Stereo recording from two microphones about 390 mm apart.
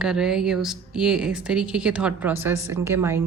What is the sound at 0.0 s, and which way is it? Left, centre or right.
A woman's voice, centre.